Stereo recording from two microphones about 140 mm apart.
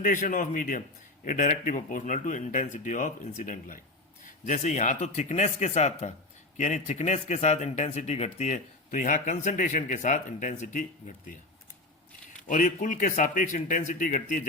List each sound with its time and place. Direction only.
0.0 s a man's voice: 70° left (ahead or behind)
4.4 s speech: 55° left (ahead or behind)
12.5 s a man's voice: 65° left (ahead or behind)